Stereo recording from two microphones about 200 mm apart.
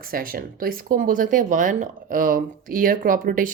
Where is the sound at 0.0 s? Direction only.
45° right (ahead or behind).